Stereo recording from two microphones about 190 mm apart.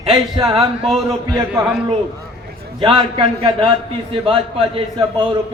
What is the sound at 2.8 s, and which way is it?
A man's voice, 25° right (ahead or behind).